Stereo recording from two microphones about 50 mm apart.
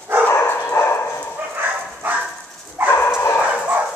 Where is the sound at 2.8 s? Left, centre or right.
Right.